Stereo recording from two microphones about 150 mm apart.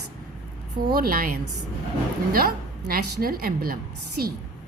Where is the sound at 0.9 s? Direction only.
70° right (ahead or behind).